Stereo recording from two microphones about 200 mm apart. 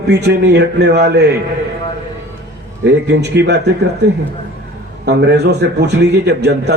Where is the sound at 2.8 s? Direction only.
60° right (ahead or behind).